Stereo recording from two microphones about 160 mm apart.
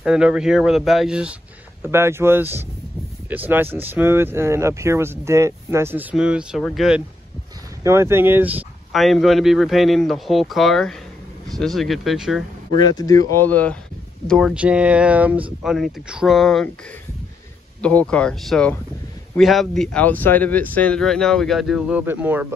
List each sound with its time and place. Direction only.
0.0 s speech: 5° right (ahead or behind)
1.8 s speech: 15° right (ahead or behind)
6.1 s speech: 5° right (ahead or behind)
7.8 s speech: 15° right (ahead or behind)
8.9 s speech: centre (ahead or behind)
12.9 s speech: 20° left (ahead or behind)
13.5 s speech: 10° left (ahead or behind)
17.8 s speech: 5° left (ahead or behind); by 22.5 s 10° right (ahead or behind)